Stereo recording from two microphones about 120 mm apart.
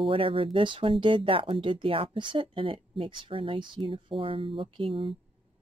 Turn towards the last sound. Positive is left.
turn(degrees=-45)  # may be behind; listen again after turning